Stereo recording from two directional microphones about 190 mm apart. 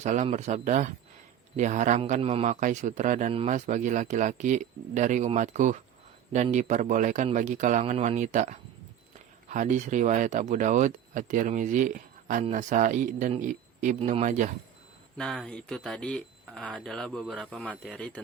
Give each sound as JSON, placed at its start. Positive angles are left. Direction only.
{"t": 0.0, "sound": "a man's voice", "side_deg": -40}
{"t": 15.2, "sound": "speech", "side_deg": 5}